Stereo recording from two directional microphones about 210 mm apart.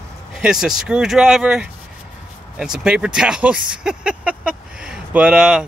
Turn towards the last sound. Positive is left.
turn(degrees=-5)  # may be behind; listen again after turning